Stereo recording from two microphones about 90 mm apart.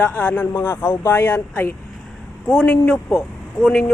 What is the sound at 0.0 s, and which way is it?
Speech, 20° left (ahead or behind).